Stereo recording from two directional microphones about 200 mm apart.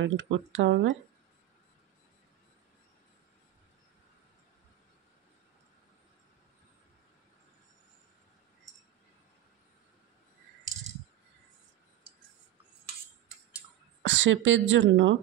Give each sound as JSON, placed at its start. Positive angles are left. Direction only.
{"t": 0.0, "sound": "speech", "side_deg": -70}
{"t": 14.0, "sound": "speech", "side_deg": -70}